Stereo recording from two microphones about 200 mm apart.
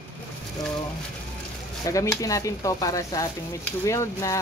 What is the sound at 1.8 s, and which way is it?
Speech, 15° left (ahead or behind).